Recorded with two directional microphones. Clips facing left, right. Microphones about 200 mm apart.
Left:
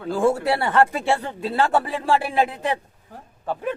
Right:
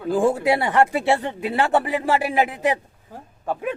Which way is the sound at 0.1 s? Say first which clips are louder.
Right 1 dB; 15° right (ahead or behind).